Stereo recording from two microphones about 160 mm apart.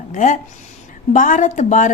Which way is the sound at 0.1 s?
50° left (ahead or behind).